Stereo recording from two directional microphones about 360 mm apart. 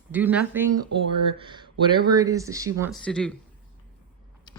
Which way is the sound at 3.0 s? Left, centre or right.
Centre.